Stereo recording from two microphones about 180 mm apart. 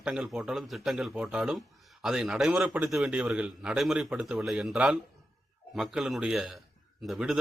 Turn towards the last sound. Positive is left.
turn(degrees=0)  # may be behind; listen again after turning